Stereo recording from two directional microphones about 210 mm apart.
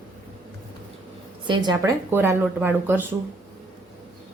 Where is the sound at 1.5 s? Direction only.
20° right (ahead or behind).